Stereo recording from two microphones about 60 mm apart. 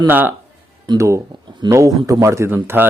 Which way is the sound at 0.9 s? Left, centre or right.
Right.